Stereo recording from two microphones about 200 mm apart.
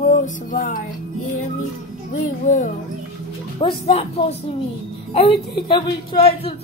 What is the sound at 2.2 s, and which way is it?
Music, 40° left (ahead or behind).